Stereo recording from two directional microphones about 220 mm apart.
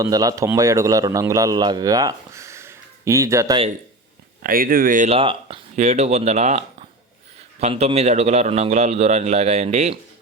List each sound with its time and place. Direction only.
0.0 s a man's voice: 15° right (ahead or behind)
4.4 s a man's voice: 40° right (ahead or behind)